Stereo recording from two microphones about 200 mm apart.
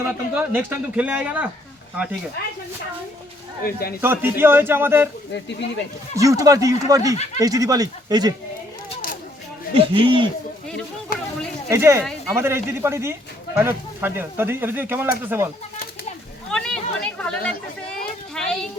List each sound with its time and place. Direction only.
0.0 s speech: 10° right (ahead or behind)
3.6 s speech: 50° left (ahead or behind)
4.0 s speech: 10° right (ahead or behind)
5.3 s speech: 60° left (ahead or behind)
6.1 s speech: 15° right (ahead or behind)
9.7 s speech: 25° right (ahead or behind)
11.7 s speech: 15° right (ahead or behind)
16.5 s chatter: 5° left (ahead or behind)
18.4 s a sound: 5° left (ahead or behind)